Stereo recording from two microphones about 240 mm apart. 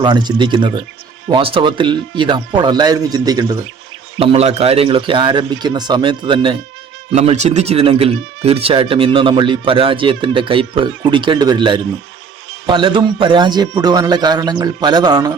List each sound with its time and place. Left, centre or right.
0.0 s speech: centre